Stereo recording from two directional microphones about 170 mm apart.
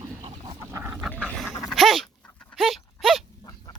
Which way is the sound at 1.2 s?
Centre (ahead or behind).